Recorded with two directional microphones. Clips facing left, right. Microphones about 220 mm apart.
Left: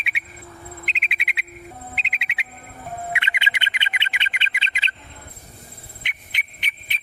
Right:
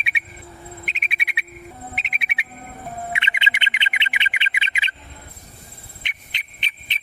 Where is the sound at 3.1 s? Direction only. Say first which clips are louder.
Right 1 dB; 20° right (ahead or behind).